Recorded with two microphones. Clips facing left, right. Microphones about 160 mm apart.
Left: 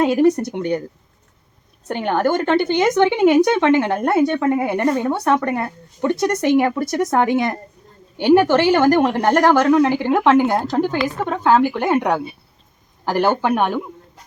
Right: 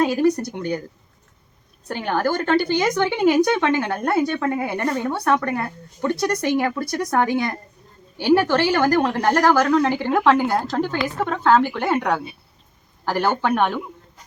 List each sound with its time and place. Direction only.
0.0 s speech: 20° left (ahead or behind)
1.9 s speech: 20° left (ahead or behind)